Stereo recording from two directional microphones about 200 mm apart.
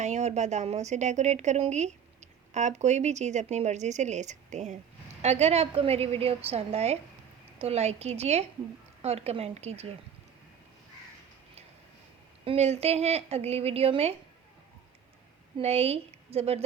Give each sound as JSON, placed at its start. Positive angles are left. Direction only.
{"t": 0.0, "sound": "a woman's voice", "side_deg": -35}
{"t": 12.5, "sound": "a woman's voice", "side_deg": -30}
{"t": 15.5, "sound": "a woman's voice", "side_deg": -30}